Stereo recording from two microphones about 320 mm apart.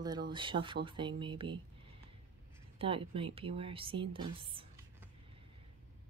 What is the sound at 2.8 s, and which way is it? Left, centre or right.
Speech, centre.